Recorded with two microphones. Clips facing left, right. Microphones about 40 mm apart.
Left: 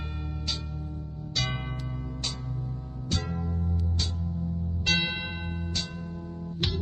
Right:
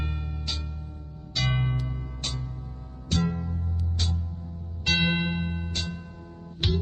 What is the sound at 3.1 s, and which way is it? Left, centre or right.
Music, right.